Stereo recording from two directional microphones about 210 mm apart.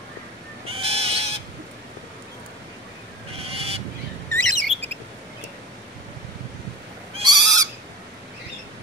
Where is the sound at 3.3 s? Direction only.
30° right (ahead or behind).